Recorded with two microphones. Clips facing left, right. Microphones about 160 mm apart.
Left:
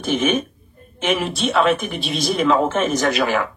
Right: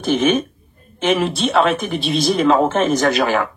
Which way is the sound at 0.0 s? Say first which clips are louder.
Right 3 dB; 30° right (ahead or behind).